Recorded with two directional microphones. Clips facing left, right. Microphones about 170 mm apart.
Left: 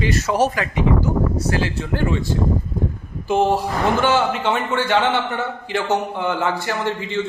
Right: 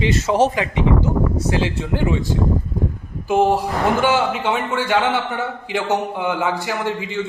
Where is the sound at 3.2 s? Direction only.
10° right (ahead or behind).